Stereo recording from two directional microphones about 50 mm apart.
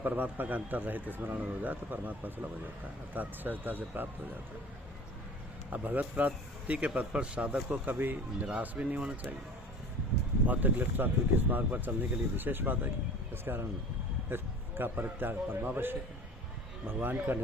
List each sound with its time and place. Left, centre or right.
0.0 s speech: right
5.7 s speech: right
10.4 s a man's voice: right